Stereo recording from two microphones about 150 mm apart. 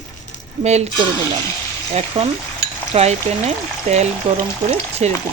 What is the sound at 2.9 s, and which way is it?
Speech, 45° right (ahead or behind).